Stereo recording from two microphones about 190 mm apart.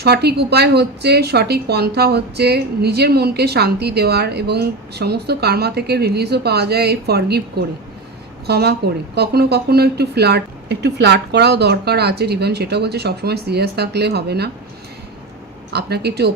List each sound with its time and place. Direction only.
0.0 s a woman's voice: 60° right (ahead or behind)
15.7 s a woman's voice: 60° right (ahead or behind)